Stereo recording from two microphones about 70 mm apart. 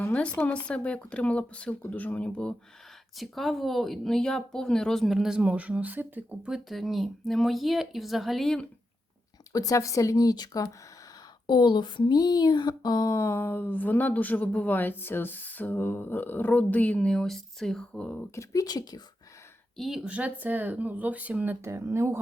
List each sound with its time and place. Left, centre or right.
0.1 s speech: centre
3.2 s speech: centre
5.0 s speech: centre; by 6.2 s right
6.7 s speech: centre
9.5 s speech: left
11.4 s speech: left
13.1 s speech: left; by 18.3 s centre
18.3 s speech: left
19.7 s speech: centre
20.1 s speech: right
21.6 s speech: right